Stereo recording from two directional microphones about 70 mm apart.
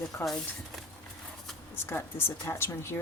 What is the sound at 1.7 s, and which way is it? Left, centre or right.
A woman's voice, left.